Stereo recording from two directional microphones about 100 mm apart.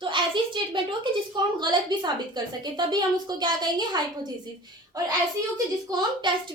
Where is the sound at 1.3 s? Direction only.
50° right (ahead or behind).